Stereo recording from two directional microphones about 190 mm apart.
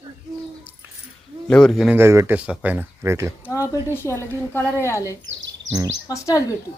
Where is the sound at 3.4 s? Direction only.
15° left (ahead or behind).